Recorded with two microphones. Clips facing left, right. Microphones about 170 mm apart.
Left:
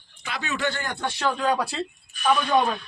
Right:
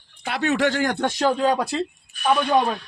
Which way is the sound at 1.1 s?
40° right (ahead or behind).